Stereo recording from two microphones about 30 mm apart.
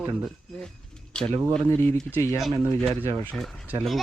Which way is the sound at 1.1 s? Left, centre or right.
Left.